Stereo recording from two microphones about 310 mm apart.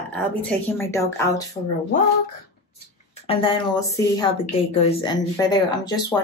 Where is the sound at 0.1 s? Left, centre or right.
Centre.